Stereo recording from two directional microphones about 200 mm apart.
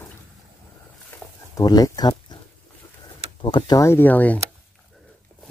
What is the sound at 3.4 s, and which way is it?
Speech, 25° left (ahead or behind).